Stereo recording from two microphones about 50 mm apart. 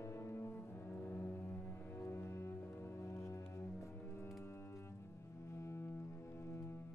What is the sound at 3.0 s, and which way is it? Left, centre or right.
Music, left.